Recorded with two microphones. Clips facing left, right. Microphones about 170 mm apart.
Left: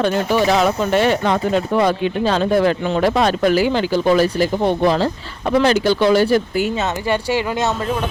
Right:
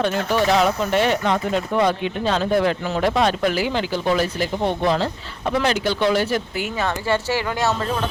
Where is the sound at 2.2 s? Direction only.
40° left (ahead or behind).